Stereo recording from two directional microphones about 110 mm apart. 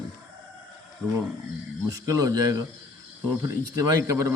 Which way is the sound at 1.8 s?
35° right (ahead or behind).